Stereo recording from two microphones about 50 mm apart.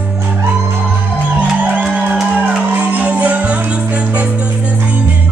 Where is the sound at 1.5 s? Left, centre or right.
Right.